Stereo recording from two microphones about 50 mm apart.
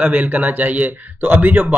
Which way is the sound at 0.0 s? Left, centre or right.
Right.